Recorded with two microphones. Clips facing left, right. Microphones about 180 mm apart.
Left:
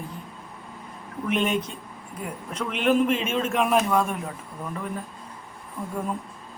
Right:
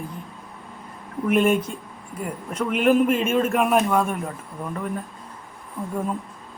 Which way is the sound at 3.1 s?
50° right (ahead or behind).